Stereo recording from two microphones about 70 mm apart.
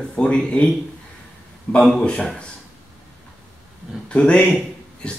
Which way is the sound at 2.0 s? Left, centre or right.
Centre.